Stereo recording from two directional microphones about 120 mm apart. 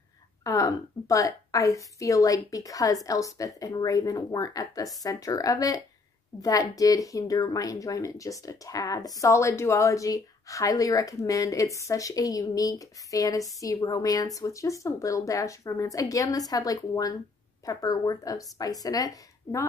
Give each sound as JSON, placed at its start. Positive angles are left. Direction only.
{"t": 0.4, "sound": "speech", "side_deg": 30}